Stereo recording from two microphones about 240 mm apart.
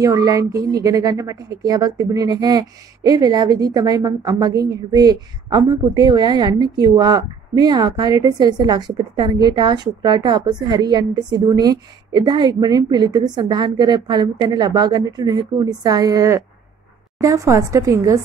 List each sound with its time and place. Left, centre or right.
0.0 s a woman's voice: centre